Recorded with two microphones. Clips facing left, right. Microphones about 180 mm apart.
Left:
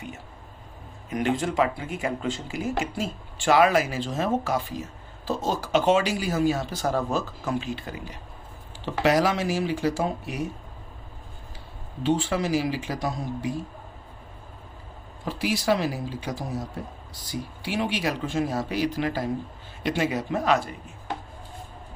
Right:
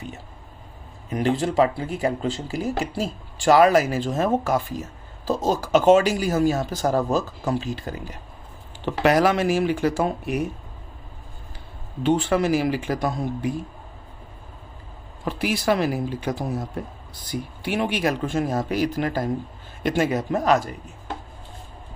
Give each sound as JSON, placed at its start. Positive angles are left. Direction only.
{"t": 1.1, "sound": "speech", "side_deg": -35}
{"t": 8.8, "sound": "speech", "side_deg": -55}
{"t": 12.0, "sound": "speech", "side_deg": -55}
{"t": 15.2, "sound": "speech", "side_deg": -60}